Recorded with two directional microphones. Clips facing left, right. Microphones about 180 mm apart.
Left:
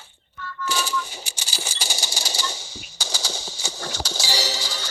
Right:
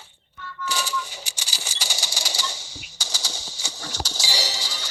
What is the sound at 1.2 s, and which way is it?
Coin, 50° left (ahead or behind).